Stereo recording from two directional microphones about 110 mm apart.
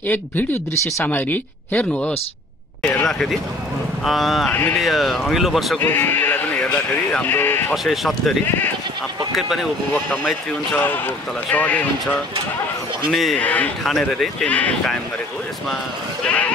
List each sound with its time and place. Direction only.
0.1 s speech: 15° left (ahead or behind)
3.1 s speech: 5° left (ahead or behind)
4.5 s speech: 15° left (ahead or behind)
4.7 s speech: centre (ahead or behind)
5.8 s speech: 20° left (ahead or behind)
7.7 s speech: centre (ahead or behind)
9.9 s speech: 15° left (ahead or behind)
13.1 s speech: centre (ahead or behind)
13.4 s speech: 15° left (ahead or behind)
13.8 s speech: 5° left (ahead or behind)
16.3 s sheep: 10° left (ahead or behind)